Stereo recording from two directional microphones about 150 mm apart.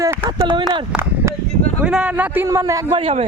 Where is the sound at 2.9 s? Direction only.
40° right (ahead or behind).